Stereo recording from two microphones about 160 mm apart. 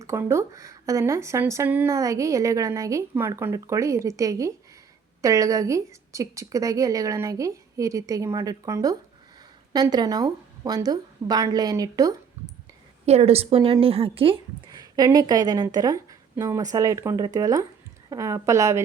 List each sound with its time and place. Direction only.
0.0 s speech: 15° right (ahead or behind)
13.1 s a woman's voice: 40° right (ahead or behind)
14.9 s speech: 25° right (ahead or behind)